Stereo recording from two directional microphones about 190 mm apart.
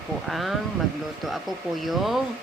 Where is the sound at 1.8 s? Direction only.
Centre (ahead or behind).